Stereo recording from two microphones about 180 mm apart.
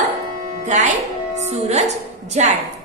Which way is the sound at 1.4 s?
35° right (ahead or behind).